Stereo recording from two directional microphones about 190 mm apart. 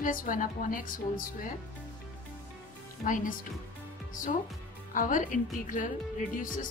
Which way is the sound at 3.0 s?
45° left (ahead or behind).